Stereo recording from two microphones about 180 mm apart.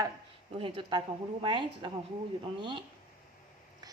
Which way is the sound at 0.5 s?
30° right (ahead or behind).